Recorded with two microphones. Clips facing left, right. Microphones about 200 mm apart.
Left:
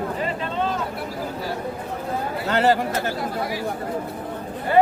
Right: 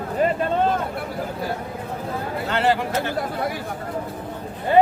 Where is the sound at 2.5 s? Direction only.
40° left (ahead or behind).